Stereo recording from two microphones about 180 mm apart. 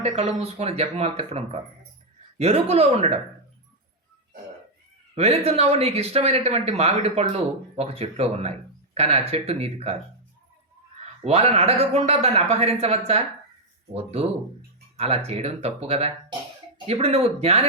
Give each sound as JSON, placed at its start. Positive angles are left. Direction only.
{"t": 0.0, "sound": "speech", "side_deg": -35}
{"t": 5.1, "sound": "speech", "side_deg": -35}
{"t": 11.2, "sound": "speech", "side_deg": -35}